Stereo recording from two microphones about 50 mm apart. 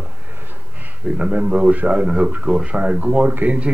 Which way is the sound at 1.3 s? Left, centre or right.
Right.